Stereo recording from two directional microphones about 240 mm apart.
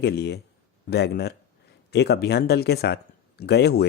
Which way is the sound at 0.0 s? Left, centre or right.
Left.